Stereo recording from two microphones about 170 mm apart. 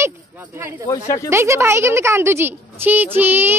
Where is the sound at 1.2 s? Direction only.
15° right (ahead or behind).